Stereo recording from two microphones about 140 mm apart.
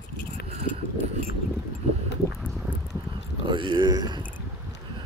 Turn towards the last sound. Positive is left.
turn(degrees=-30)  # may be behind; listen again after turning